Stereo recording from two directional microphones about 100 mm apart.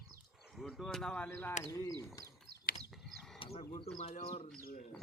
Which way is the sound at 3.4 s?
80° left.